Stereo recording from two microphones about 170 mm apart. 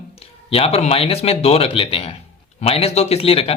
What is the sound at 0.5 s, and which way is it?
Speech, 35° left (ahead or behind).